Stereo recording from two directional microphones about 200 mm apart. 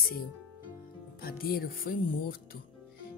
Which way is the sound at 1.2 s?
50° left (ahead or behind).